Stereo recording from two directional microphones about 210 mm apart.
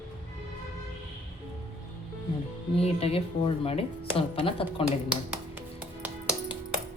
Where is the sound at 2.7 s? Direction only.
30° left (ahead or behind).